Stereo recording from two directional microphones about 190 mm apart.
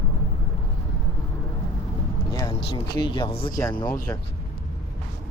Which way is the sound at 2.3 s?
20° left (ahead or behind).